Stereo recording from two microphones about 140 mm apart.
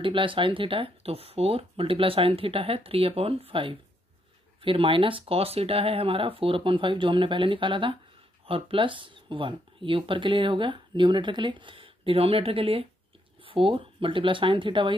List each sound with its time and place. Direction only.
0.0 s speech: 35° right (ahead or behind)